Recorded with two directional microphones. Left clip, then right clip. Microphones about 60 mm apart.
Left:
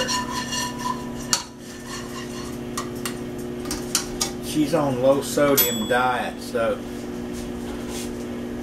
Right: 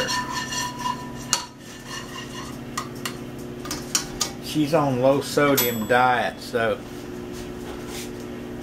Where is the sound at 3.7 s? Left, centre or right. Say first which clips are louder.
Even; centre.